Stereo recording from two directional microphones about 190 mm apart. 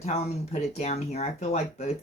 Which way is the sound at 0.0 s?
35° left (ahead or behind).